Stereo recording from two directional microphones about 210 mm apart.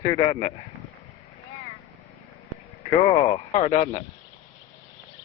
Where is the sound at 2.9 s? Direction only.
25° left (ahead or behind).